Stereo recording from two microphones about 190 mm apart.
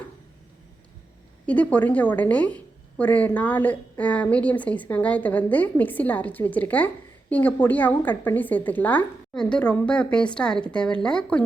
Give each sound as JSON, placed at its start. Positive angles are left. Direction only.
{"t": 1.5, "sound": "a woman's voice", "side_deg": 10}